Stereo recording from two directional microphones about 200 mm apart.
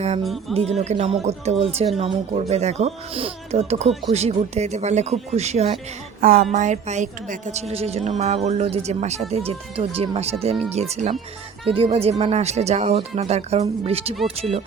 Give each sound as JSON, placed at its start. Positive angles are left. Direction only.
{"t": 0.2, "sound": "speech", "side_deg": 0}
{"t": 0.5, "sound": "speech", "side_deg": -30}
{"t": 6.1, "sound": "speech", "side_deg": -45}